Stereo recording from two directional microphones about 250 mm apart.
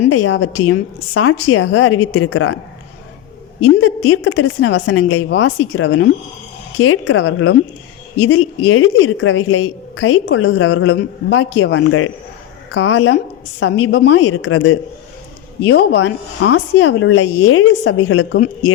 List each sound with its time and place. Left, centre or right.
0.1 s a woman's voice: left
3.8 s a woman's voice: left